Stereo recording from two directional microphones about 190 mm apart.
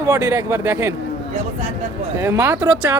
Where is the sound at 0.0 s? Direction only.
15° right (ahead or behind).